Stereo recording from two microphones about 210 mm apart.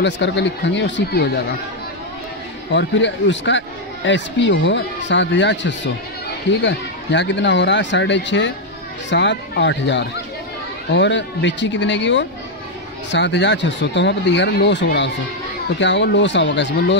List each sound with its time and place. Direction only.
0.0 s speech: 55° left (ahead or behind)
2.7 s speech: 60° left (ahead or behind)